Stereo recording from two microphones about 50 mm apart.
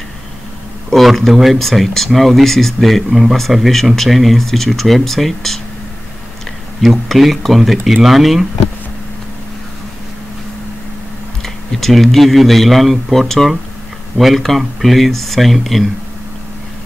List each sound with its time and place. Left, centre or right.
0.8 s speech: centre
6.8 s speech: centre
11.4 s speech: centre